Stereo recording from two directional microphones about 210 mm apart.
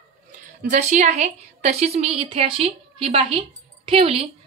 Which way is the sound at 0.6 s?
35° right (ahead or behind).